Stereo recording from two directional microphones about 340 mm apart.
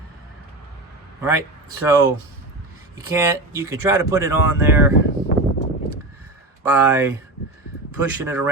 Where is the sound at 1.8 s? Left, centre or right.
Centre.